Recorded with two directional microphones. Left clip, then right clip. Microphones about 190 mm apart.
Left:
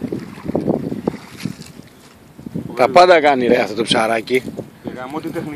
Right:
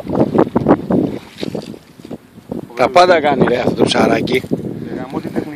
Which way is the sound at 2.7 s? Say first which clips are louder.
Even; centre (ahead or behind).